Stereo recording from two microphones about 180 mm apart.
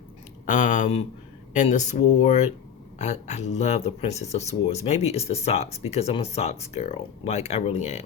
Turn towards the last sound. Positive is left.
turn(degrees=40)  # may be behind; listen again after turning